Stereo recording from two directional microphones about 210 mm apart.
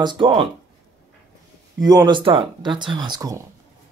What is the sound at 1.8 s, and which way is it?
Speech, 20° right (ahead or behind).